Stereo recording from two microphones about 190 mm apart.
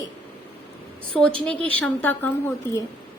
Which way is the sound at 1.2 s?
5° left (ahead or behind).